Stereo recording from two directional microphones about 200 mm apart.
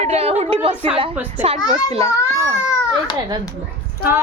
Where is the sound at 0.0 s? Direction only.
30° right (ahead or behind).